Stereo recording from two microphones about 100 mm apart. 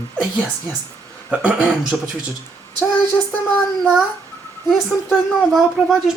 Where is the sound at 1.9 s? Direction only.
Centre (ahead or behind).